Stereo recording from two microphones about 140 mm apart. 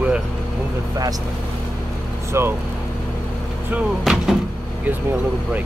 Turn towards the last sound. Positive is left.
turn(degrees=-5)  # may be behind; listen again after turning